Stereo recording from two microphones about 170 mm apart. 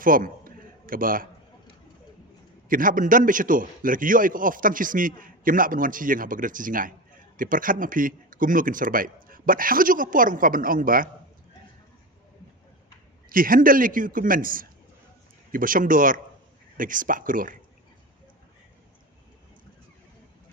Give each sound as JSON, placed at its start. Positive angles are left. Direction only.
{"t": 0.0, "sound": "a sound", "side_deg": -55}
{"t": 2.6, "sound": "a man's voice", "side_deg": -55}
{"t": 13.3, "sound": "a man's voice", "side_deg": -55}